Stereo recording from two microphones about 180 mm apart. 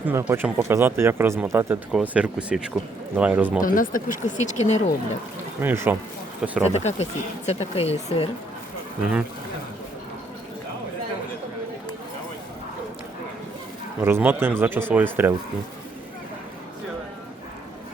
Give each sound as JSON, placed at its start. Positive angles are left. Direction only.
{"t": 0.0, "sound": "speech", "side_deg": -10}
{"t": 3.6, "sound": "speech", "side_deg": 50}
{"t": 5.5, "sound": "speech", "side_deg": -10}
{"t": 6.7, "sound": "speech", "side_deg": 35}
{"t": 14.0, "sound": "speech", "side_deg": -10}